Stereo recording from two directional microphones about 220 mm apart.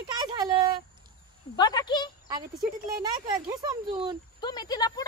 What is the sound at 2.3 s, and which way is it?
Speech, 20° right (ahead or behind).